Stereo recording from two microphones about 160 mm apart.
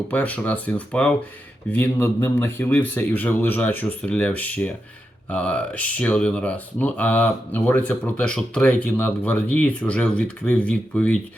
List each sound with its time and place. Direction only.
0.1 s speech: 10° left (ahead or behind)